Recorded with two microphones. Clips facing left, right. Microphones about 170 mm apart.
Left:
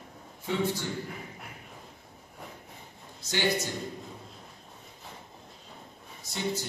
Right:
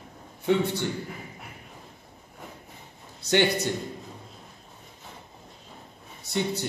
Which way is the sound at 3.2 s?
65° right (ahead or behind).